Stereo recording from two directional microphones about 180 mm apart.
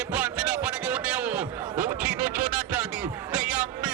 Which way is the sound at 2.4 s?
50° right (ahead or behind).